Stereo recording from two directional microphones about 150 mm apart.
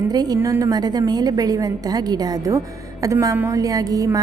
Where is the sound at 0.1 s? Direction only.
25° right (ahead or behind).